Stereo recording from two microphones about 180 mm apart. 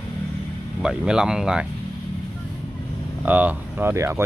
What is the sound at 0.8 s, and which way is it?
Speech, 5° right (ahead or behind).